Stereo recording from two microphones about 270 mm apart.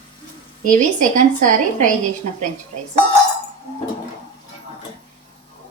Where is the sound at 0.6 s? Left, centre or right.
Right.